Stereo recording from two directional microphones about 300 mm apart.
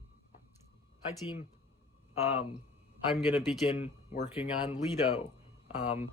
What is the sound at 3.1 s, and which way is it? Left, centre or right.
Speech, centre.